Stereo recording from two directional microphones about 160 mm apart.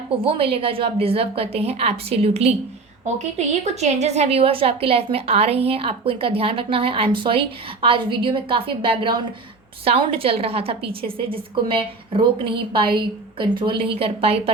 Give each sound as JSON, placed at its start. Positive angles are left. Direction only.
{"t": 0.2, "sound": "a woman's voice", "side_deg": -35}